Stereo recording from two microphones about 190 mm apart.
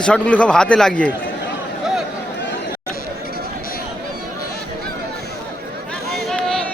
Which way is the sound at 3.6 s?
50° left (ahead or behind).